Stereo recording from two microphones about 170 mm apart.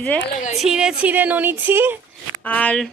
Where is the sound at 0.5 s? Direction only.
5° right (ahead or behind).